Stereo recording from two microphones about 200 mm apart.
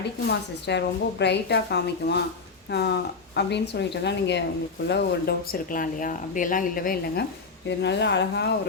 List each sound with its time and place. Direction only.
0.3 s a woman's voice: 60° left (ahead or behind)
7.8 s a woman's voice: 60° left (ahead or behind)